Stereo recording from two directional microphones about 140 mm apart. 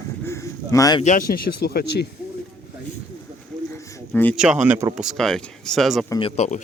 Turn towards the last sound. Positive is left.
turn(degrees=50)  # may be behind; listen again after turning